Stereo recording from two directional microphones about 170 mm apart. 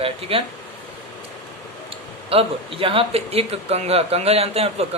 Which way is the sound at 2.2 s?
35° right (ahead or behind).